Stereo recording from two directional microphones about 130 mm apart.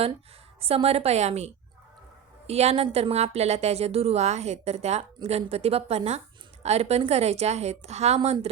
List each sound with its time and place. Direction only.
0.6 s a woman's voice: 50° right (ahead or behind)